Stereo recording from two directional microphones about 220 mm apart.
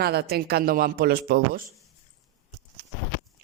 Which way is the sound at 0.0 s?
45° right (ahead or behind).